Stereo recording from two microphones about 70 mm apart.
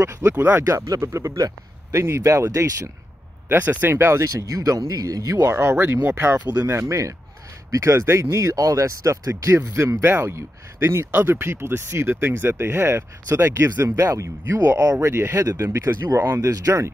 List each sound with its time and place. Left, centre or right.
0.0 s speech: right
0.7 s speech: right
3.4 s speech: right
4.2 s speech: right
5.4 s speech: right
10.0 s speech: right